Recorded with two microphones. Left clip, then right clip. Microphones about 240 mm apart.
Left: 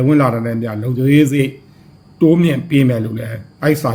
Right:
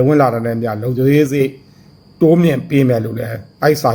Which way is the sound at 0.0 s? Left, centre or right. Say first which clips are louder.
Right 2 dB; centre.